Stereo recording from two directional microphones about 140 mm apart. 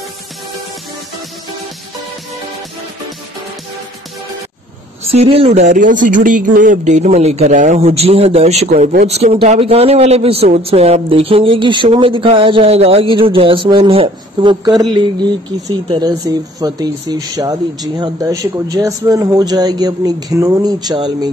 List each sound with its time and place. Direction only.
5.0 s speech: 45° right (ahead or behind)
15.9 s speech: 30° right (ahead or behind)